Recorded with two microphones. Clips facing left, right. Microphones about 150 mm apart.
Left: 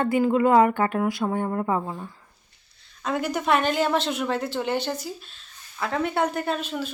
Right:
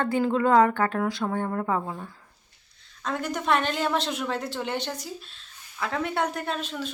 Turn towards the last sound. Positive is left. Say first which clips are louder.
# left 3 dB
turn(degrees=5)  # may be behind; listen again after turning